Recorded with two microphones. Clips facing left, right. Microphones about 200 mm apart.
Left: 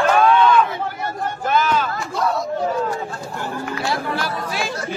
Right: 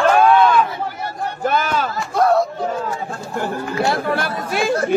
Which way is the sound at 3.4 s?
55° right (ahead or behind).